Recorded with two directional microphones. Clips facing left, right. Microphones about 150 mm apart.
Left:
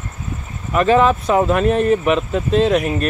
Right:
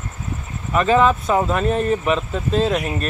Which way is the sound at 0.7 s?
Centre (ahead or behind).